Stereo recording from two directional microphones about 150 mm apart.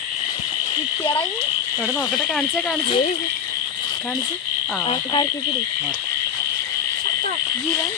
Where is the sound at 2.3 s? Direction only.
Centre (ahead or behind).